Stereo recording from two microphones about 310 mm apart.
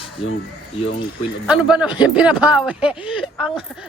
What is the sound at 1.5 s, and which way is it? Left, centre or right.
Speech, centre.